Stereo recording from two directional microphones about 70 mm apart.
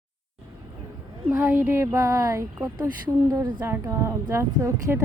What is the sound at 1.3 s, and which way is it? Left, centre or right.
Speech, right.